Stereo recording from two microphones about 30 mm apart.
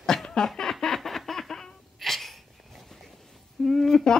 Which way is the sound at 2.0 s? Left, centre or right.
Centre.